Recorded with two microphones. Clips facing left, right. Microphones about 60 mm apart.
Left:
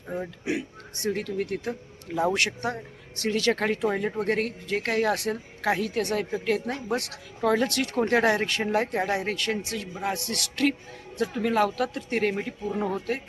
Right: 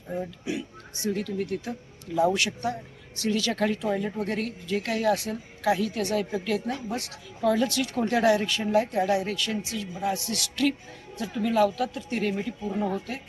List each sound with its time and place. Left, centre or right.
0.4 s speech: left
6.3 s a woman's voice: left
6.9 s speech: left
7.4 s speech: left
12.7 s speech: left